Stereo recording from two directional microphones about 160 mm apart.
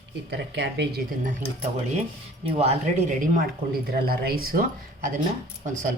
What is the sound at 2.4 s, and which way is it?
Speech, 40° right (ahead or behind).